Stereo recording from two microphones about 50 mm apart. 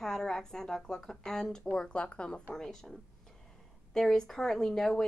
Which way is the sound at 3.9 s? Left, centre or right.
Centre.